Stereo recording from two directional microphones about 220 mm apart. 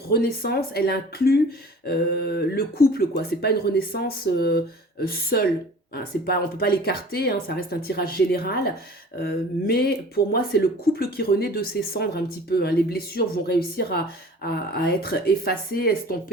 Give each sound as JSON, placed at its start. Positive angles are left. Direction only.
{"t": 0.1, "sound": "speech", "side_deg": 45}